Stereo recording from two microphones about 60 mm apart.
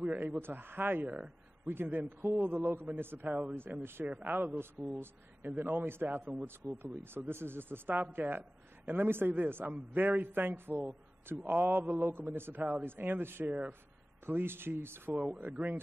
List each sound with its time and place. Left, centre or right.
0.0 s a man's voice: right
0.4 s speech: right
1.0 s a man's voice: centre
1.7 s a man's voice: right
4.8 s a man's voice: centre
5.5 s speech: right
6.6 s a man's voice: centre
7.0 s speech: right
13.5 s a man's voice: right
14.2 s speech: right
15.1 s a man's voice: right